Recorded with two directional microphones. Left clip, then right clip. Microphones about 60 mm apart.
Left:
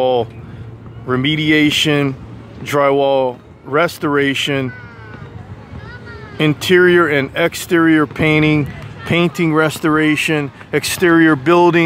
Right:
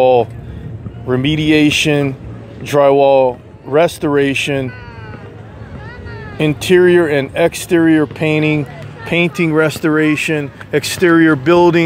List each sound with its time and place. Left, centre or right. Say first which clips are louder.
0.0 s speech: right 5 dB; centre; by 4.6 s left
6.3 s speech: right 1 dB; left